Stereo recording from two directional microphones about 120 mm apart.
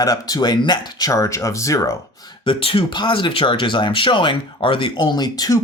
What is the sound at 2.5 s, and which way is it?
Speech, 45° left (ahead or behind).